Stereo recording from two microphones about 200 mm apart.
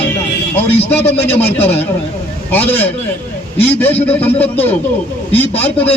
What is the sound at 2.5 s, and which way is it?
A man's voice, 10° left (ahead or behind).